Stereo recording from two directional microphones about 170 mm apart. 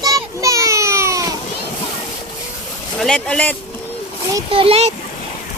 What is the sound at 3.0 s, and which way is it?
Speech, 5° left (ahead or behind).